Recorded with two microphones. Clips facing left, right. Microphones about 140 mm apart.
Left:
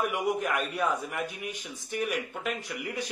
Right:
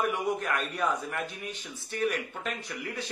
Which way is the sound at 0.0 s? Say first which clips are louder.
Left 1 dB; 10° left (ahead or behind).